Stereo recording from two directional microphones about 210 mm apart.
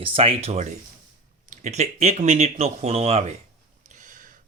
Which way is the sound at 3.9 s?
35° right (ahead or behind).